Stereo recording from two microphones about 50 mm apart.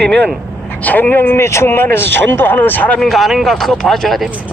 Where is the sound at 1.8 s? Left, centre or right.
Left.